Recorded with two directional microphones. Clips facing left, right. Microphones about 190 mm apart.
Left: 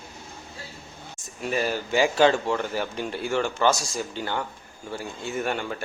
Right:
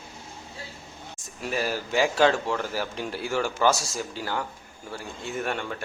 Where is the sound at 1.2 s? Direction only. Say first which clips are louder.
Left 2 dB; centre (ahead or behind).